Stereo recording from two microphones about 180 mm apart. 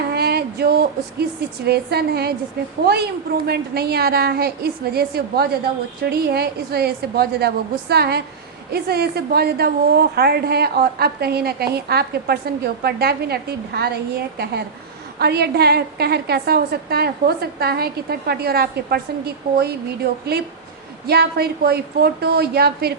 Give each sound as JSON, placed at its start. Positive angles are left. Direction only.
{"t": 0.1, "sound": "a woman's voice", "side_deg": -60}
{"t": 3.4, "sound": "a woman's voice", "side_deg": -60}